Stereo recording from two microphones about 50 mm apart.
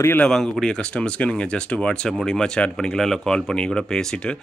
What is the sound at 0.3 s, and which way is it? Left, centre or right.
Speech, centre.